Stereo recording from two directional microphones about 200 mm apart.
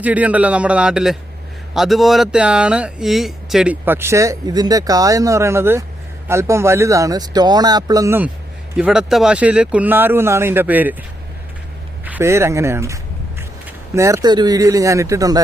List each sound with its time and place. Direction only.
0.0 s speech: 5° right (ahead or behind)
12.0 s speech: 10° right (ahead or behind)